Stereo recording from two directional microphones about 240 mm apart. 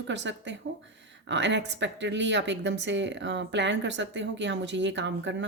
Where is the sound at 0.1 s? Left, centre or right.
Right.